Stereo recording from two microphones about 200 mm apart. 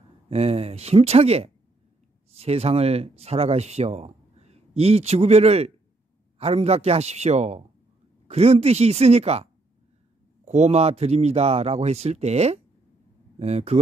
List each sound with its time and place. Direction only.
0.3 s speech: 30° right (ahead or behind)